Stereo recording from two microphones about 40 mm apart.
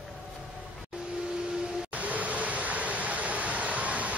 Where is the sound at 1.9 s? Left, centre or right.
Right.